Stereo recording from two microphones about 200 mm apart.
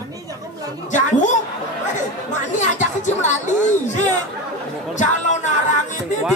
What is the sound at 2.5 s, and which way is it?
Speech, 35° left (ahead or behind).